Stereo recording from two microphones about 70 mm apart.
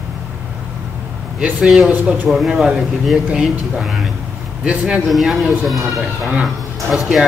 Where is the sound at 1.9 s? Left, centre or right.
Right.